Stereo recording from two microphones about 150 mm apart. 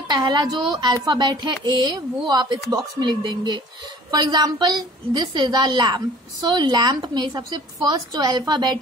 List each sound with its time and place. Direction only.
0.1 s a woman's voice: 30° right (ahead or behind)